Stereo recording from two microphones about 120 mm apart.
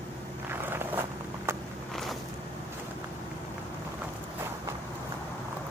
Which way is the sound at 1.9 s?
Centre (ahead or behind).